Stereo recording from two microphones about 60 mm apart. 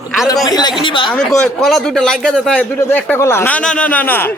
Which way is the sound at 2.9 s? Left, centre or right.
Left.